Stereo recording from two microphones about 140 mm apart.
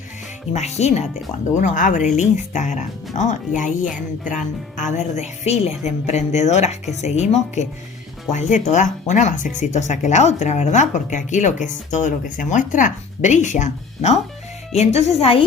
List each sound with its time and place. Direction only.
0.5 s speech: 50° left (ahead or behind)
1.5 s a woman's voice: 65° left (ahead or behind); by 15.4 s 40° left (ahead or behind)